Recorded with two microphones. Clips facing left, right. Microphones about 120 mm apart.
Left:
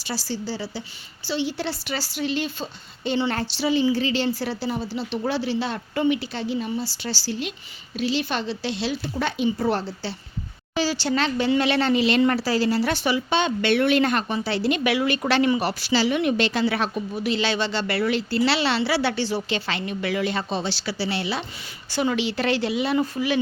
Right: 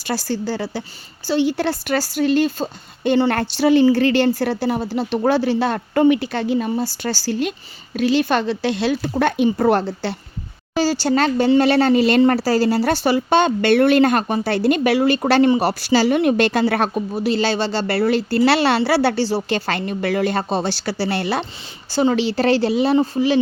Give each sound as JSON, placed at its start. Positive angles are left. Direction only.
{"t": 0.0, "sound": "speech", "side_deg": -50}
{"t": 10.8, "sound": "speech", "side_deg": -40}
{"t": 21.8, "sound": "speech", "side_deg": -30}